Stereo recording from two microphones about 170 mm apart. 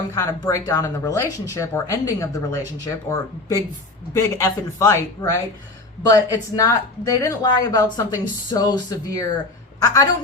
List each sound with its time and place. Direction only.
0.1 s a man's voice: 20° left (ahead or behind)